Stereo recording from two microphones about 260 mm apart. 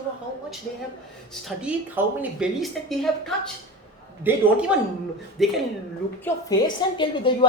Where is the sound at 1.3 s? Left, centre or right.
Centre.